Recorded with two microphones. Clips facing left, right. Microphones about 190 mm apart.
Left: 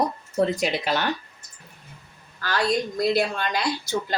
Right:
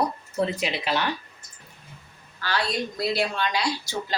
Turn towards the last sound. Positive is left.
turn(degrees=50)  # may be behind; listen again after turning